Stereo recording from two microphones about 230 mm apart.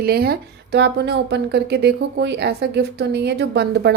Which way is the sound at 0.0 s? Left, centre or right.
Right.